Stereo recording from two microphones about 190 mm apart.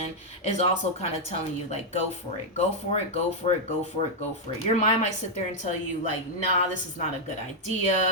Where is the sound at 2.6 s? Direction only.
35° left (ahead or behind).